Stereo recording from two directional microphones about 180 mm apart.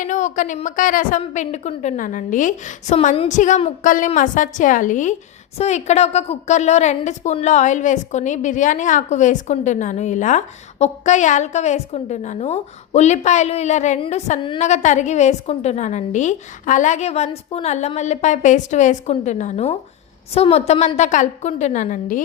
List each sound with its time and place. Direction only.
0.0 s a woman's voice: 45° left (ahead or behind)